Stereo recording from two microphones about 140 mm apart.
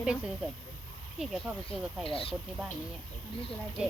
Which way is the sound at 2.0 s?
40° left (ahead or behind).